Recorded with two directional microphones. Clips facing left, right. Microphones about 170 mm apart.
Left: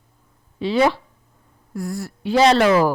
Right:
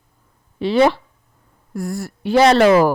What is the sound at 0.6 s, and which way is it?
Speech, 65° right (ahead or behind).